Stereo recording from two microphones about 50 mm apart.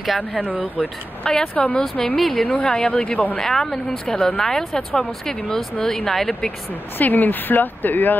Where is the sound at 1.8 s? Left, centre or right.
Centre.